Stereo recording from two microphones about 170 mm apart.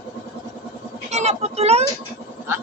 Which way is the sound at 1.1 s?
40° right (ahead or behind).